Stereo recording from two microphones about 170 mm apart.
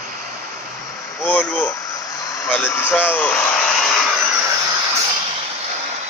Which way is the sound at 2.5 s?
10° left (ahead or behind).